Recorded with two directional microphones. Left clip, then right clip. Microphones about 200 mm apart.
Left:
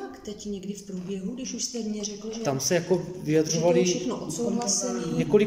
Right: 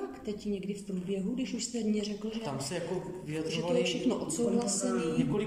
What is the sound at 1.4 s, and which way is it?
Speech, 5° right (ahead or behind).